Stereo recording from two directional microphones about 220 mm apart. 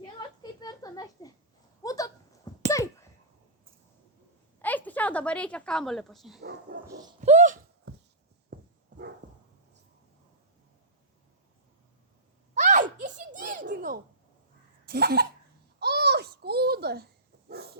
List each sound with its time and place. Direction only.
0.2 s a sound: 15° left (ahead or behind)
4.6 s a woman's voice: 5° left (ahead or behind)
6.8 s speech: 15° right (ahead or behind)
7.2 s a sound: 35° right (ahead or behind)
8.5 s dog: 45° right (ahead or behind)
12.5 s giggle: 35° right (ahead or behind)
14.8 s cough: 45° right (ahead or behind)
15.8 s babbling: 45° right (ahead or behind)
17.5 s dog: 45° right (ahead or behind)